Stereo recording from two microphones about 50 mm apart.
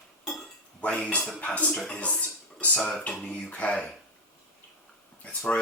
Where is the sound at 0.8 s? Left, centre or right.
Left.